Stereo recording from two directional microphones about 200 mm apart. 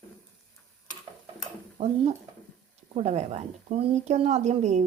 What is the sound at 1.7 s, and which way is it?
Speech, 35° right (ahead or behind).